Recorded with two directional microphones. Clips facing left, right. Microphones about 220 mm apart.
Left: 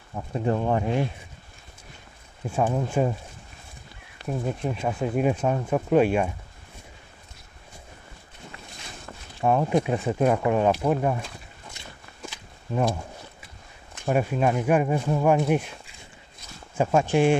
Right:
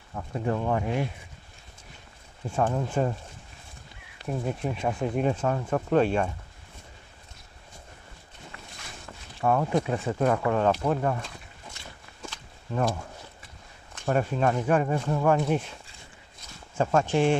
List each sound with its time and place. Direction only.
0.1 s speech: 25° left (ahead or behind)
2.5 s speech: 10° left (ahead or behind)
4.3 s speech: centre (ahead or behind)
5.3 s speech: 15° left (ahead or behind)
9.4 s speech: 20° left (ahead or behind)
12.2 s walk: 10° left (ahead or behind)
13.9 s speech: 10° left (ahead or behind)
16.7 s speech: 10° left (ahead or behind)